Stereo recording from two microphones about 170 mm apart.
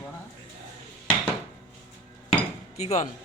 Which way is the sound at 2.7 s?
40° left (ahead or behind).